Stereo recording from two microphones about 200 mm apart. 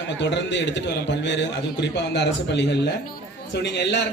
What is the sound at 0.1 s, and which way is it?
A man's voice, 60° left (ahead or behind).